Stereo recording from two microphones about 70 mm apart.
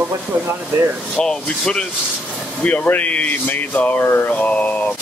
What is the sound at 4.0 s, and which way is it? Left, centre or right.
Mantra, left.